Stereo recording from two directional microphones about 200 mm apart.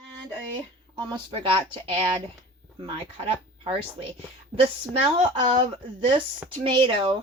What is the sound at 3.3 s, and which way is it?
Speech, 25° right (ahead or behind).